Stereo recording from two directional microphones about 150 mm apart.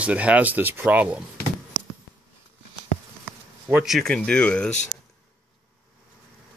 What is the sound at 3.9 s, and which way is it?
Speech, centre (ahead or behind).